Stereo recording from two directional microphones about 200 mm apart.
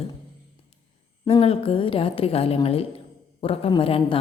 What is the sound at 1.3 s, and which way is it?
A woman's voice, 30° left (ahead or behind).